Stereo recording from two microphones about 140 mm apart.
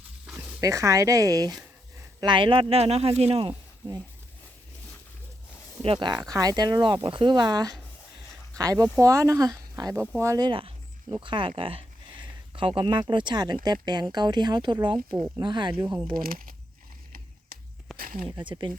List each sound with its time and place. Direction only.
0.3 s dog: 5° right (ahead or behind)
0.6 s speech: 20° right (ahead or behind)
2.2 s speech: 35° right (ahead or behind)
5.8 s speech: 35° right (ahead or behind)
10.5 s speech: 40° right (ahead or behind)
16.1 s speech: 90° right
17.9 s a sound: 85° right
18.3 s speech: 35° right (ahead or behind)